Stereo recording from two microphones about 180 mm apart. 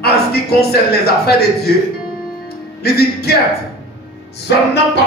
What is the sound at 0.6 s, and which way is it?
Speech, 60° left (ahead or behind).